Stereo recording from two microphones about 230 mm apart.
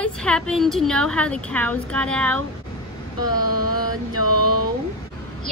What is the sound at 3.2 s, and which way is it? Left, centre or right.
Mantra, centre.